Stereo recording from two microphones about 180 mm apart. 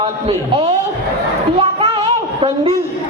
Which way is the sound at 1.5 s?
30° right (ahead or behind).